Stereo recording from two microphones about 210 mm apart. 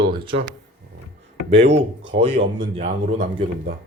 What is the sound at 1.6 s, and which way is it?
Speech, 55° right (ahead or behind).